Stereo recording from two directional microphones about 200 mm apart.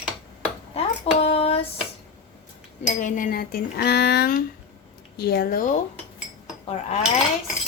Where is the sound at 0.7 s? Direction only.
30° left (ahead or behind).